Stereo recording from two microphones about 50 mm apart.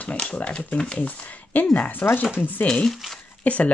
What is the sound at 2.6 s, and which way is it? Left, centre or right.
Speech, centre.